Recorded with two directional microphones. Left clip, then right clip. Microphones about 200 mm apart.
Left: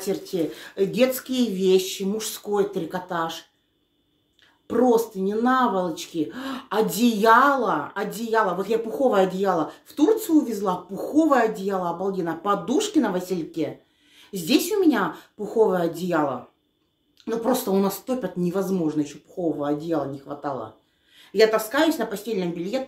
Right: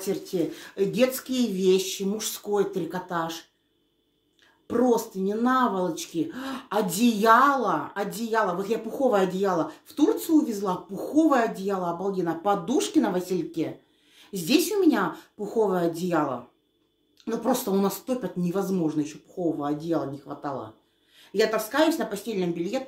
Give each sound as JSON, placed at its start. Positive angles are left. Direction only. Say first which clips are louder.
{"t": 0.0, "sound": "speech", "louder": "left 2 dB", "side_deg": 0}
{"t": 4.6, "sound": "speech", "louder": "left 4 dB", "side_deg": 0}